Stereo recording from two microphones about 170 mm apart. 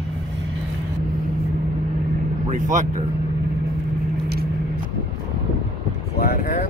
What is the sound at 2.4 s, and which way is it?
Speech, 45° right (ahead or behind).